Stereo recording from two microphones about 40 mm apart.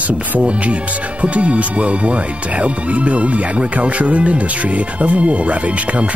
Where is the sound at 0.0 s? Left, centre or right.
Right.